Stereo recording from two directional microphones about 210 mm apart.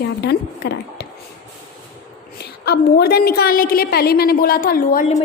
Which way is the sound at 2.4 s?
50° left (ahead or behind).